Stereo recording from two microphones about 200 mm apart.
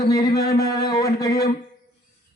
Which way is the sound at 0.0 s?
15° left (ahead or behind).